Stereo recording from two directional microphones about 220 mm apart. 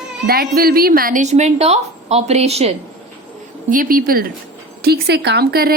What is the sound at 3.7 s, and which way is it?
A woman's voice, 40° right (ahead or behind).